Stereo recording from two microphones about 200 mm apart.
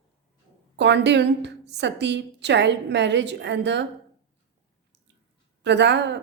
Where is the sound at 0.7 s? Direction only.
60° right (ahead or behind).